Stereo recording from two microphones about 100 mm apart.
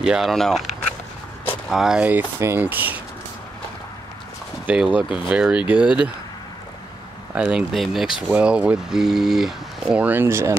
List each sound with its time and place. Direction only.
0.0 s speech: 5° right (ahead or behind)
2.0 s speech: 20° right (ahead or behind)
4.6 s speech: 15° right (ahead or behind)
7.5 s speech: centre (ahead or behind)
8.3 s speech: 10° right (ahead or behind)
10.0 s speech: 20° right (ahead or behind)